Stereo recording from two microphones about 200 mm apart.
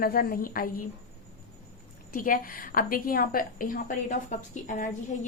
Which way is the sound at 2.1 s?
45° left (ahead or behind).